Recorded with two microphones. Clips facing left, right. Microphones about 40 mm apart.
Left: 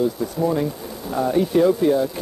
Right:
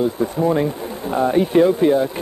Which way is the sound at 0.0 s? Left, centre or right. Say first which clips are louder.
Right 3 dB; right.